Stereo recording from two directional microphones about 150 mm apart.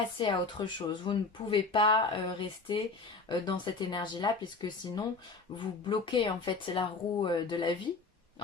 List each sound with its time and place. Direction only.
0.2 s speech: 30° left (ahead or behind)